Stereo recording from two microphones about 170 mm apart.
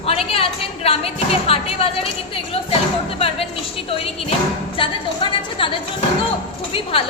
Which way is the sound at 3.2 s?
35° left (ahead or behind).